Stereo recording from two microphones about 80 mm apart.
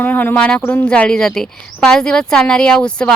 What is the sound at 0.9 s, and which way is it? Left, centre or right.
A woman's voice, centre.